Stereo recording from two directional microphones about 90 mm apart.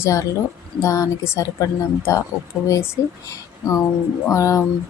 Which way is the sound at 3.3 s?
35° left (ahead or behind).